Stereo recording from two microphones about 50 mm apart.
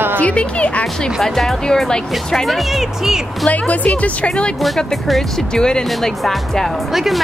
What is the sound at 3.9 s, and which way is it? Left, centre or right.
Speech, left.